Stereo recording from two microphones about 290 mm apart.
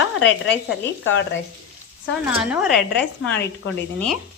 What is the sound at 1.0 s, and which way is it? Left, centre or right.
Speech, left.